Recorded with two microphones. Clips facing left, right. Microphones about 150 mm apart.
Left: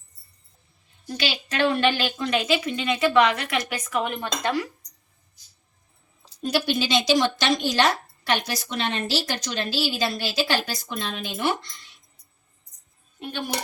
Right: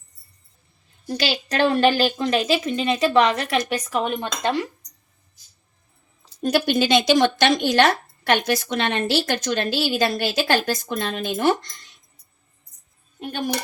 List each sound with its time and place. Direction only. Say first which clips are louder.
1.0 s a woman's voice: right 4 dB; 40° right (ahead or behind); by 4.7 s 25° right (ahead or behind)
6.4 s speech: right 4 dB; 50° right (ahead or behind)